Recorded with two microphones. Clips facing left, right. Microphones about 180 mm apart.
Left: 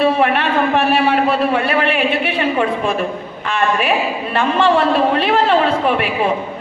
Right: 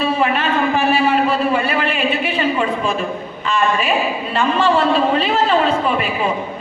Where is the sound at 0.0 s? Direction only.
60° left (ahead or behind).